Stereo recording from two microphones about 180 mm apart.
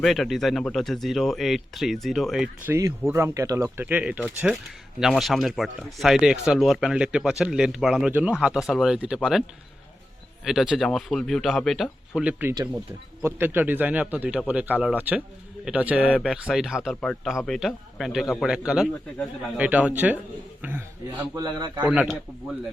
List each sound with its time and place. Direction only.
0.0 s speech: centre (ahead or behind)
2.7 s speech: 15° right (ahead or behind)
10.4 s a man's voice: centre (ahead or behind)
21.3 s a man's voice: 25° right (ahead or behind)
22.0 s speech: 5° left (ahead or behind)